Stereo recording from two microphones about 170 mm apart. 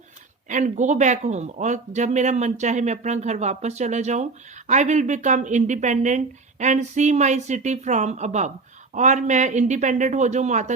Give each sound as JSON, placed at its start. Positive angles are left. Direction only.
{"t": 0.4, "sound": "speech", "side_deg": -45}